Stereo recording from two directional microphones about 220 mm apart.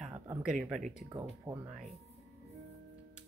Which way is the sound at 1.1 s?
10° right (ahead or behind).